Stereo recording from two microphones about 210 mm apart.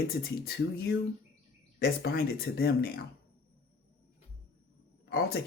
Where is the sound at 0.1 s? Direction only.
50° left (ahead or behind).